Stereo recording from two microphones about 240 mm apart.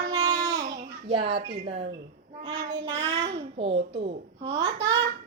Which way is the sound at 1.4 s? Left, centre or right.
Right.